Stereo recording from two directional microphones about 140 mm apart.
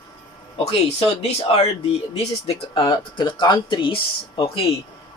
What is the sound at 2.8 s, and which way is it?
Speech, 35° left (ahead or behind).